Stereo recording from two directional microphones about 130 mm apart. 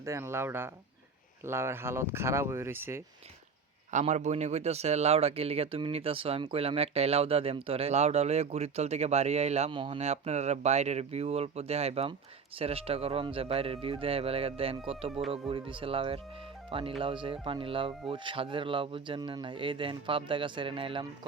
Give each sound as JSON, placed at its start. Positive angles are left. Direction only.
{"t": 0.0, "sound": "speech", "side_deg": -20}
{"t": 3.9, "sound": "speech", "side_deg": -65}
{"t": 9.7, "sound": "speech", "side_deg": -40}
{"t": 10.0, "sound": "speech", "side_deg": -55}